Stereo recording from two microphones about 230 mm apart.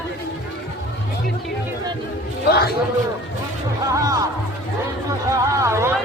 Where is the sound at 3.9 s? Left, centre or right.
Centre.